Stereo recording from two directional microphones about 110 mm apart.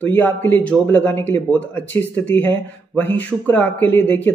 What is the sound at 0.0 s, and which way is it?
Speech, 15° left (ahead or behind).